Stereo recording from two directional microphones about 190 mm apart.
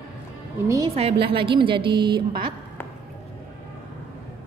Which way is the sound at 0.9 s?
30° right (ahead or behind).